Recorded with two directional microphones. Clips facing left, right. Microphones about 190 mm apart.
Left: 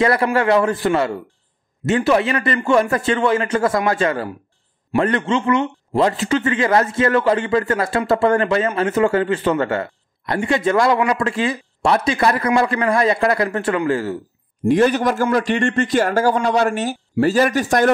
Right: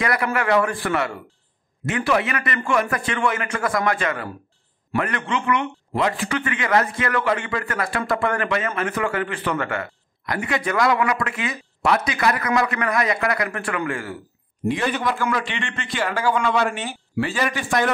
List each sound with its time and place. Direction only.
0.0 s a man's voice: 30° left (ahead or behind)
14.7 s a man's voice: 45° left (ahead or behind)